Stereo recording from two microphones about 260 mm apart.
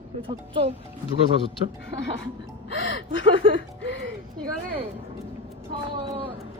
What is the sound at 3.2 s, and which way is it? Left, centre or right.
Speech, right.